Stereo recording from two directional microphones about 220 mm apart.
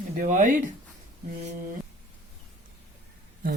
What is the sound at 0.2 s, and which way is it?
Speech, 35° right (ahead or behind).